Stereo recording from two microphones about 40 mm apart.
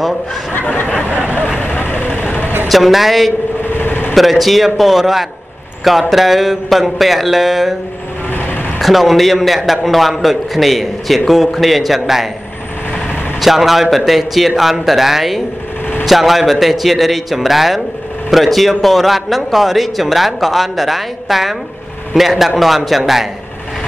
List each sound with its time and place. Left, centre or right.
0.5 s speech: left
1.0 s vehicle: right
1.6 s vehicle: left
2.7 s a man's voice: centre
3.7 s a sound: left
4.1 s a man's voice: centre
8.3 s vehicle: left
8.7 s a man's voice: centre
13.4 s a man's voice: centre